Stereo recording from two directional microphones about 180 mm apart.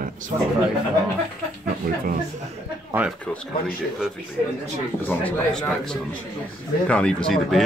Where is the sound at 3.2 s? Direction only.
5° left (ahead or behind).